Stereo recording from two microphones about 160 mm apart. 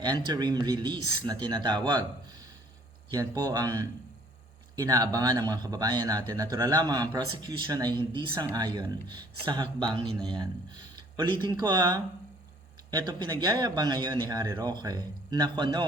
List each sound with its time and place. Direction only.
0.3 s a man's voice: 25° right (ahead or behind)
3.1 s a man's voice: 25° right (ahead or behind)